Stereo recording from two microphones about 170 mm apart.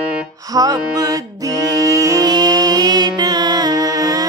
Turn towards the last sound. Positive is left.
turn(degrees=-20)  # may be behind; listen again after turning